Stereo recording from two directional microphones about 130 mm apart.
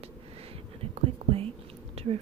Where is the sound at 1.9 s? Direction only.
50° right (ahead or behind).